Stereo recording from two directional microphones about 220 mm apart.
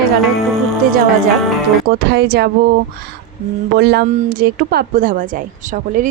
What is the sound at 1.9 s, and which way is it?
Speech, 45° right (ahead or behind).